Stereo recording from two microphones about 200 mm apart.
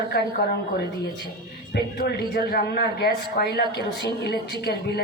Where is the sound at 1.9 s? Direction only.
55° left (ahead or behind).